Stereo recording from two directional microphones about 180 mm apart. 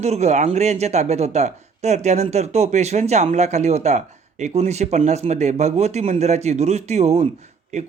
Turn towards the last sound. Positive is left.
turn(degrees=-40)  # may be behind; listen again after turning